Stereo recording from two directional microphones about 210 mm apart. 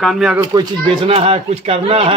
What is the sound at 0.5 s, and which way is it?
Speech, 25° right (ahead or behind).